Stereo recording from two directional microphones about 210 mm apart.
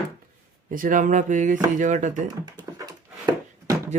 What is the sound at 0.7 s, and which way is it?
Speech, 40° right (ahead or behind).